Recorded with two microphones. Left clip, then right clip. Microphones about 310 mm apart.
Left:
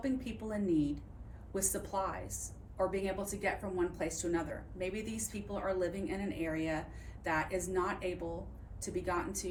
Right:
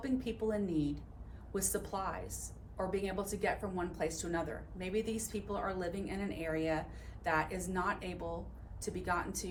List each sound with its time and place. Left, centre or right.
0.0 s a woman's voice: centre